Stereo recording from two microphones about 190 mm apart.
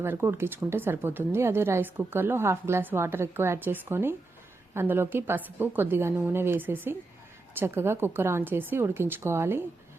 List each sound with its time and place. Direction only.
0.0 s speech: 10° right (ahead or behind)